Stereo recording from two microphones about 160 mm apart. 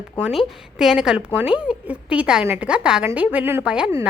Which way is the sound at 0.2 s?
5° right (ahead or behind).